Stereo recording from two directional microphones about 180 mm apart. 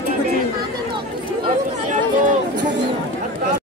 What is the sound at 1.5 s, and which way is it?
Chatter, 45° right (ahead or behind).